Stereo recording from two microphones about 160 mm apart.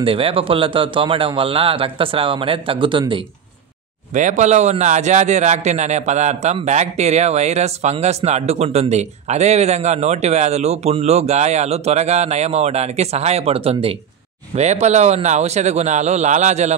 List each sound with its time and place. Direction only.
0.0 s speech: 35° right (ahead or behind)
4.1 s a man's voice: 50° right (ahead or behind)